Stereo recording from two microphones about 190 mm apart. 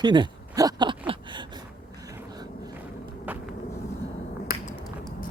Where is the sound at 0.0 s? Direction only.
25° right (ahead or behind).